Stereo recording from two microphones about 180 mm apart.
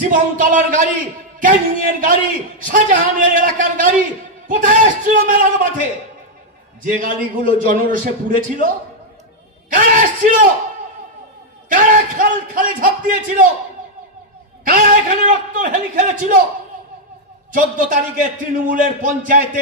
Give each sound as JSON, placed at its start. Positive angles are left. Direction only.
{"t": 0.1, "sound": "a man's voice", "side_deg": -50}
{"t": 11.7, "sound": "a man's voice", "side_deg": -50}
{"t": 14.6, "sound": "a man's voice", "side_deg": -50}
{"t": 17.5, "sound": "a man's voice", "side_deg": -50}